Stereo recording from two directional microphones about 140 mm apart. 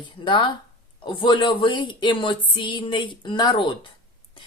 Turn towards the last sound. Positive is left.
turn(degrees=35)  # may be behind; listen again after turning